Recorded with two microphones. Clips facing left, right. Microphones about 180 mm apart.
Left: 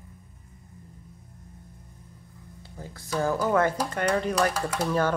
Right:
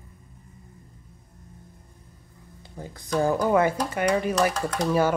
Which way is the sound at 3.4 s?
10° right (ahead or behind).